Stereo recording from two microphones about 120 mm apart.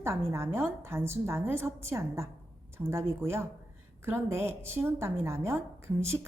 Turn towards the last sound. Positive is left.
turn(degrees=-20)  # may be behind; listen again after turning